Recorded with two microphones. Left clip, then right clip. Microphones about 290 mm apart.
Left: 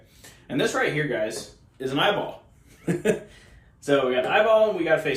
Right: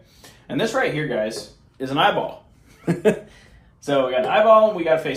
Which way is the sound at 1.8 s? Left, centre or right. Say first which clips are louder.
Right 4 dB; centre.